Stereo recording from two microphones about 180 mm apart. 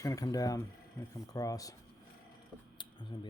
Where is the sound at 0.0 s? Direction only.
20° left (ahead or behind).